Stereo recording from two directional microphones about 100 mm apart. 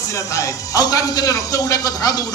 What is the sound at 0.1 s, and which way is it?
Speech, 30° left (ahead or behind).